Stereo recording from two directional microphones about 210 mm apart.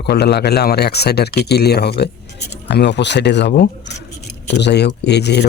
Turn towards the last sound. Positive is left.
turn(degrees=50)  # may be behind; listen again after turning